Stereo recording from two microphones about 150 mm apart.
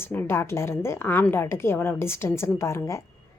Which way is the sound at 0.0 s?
15° left (ahead or behind).